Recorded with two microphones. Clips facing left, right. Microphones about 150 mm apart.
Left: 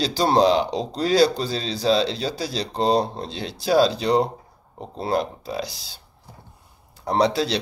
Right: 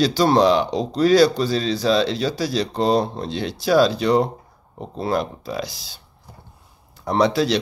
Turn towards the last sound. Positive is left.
turn(degrees=30)  # may be behind; listen again after turning